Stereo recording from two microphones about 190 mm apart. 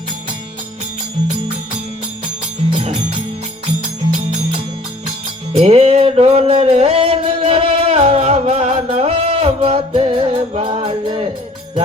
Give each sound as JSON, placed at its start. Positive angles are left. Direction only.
{"t": 2.7, "sound": "music", "side_deg": -30}
{"t": 5.5, "sound": "music", "side_deg": -35}